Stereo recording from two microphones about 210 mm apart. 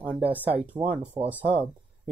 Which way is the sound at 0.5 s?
30° right (ahead or behind).